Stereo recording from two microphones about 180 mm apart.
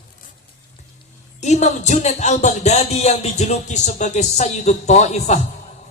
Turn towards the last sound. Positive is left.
turn(degrees=40)  # may be behind; listen again after turning